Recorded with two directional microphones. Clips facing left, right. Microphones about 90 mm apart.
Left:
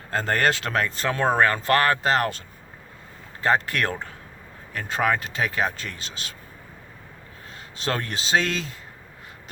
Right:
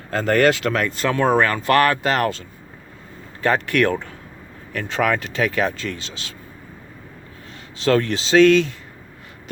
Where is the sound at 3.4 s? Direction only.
30° left (ahead or behind).